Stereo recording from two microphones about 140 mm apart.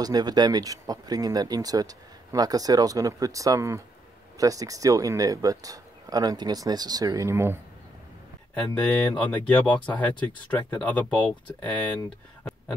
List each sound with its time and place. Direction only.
0.0 s speech: 30° right (ahead or behind)
8.8 s speech: 10° left (ahead or behind)